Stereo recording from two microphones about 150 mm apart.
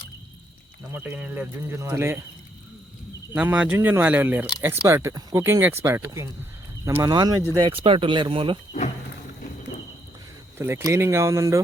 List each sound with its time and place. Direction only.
0.9 s speech: 10° right (ahead or behind)
3.3 s a man's voice: 10° right (ahead or behind); by 8.5 s 35° right (ahead or behind)
10.6 s speech: 15° right (ahead or behind)